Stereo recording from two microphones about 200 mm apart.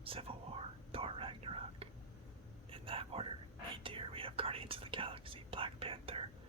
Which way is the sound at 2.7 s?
25° right (ahead or behind).